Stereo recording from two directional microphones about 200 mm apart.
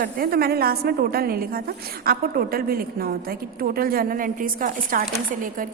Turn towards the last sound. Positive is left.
turn(degrees=-45)  # may be behind; listen again after turning